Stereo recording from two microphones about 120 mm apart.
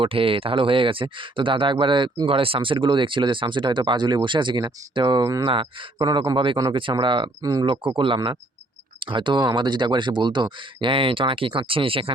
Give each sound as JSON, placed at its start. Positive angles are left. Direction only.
{"t": 0.0, "sound": "speech", "side_deg": -50}